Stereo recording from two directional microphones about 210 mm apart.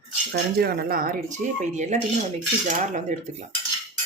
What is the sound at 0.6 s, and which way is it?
Speech, 45° right (ahead or behind).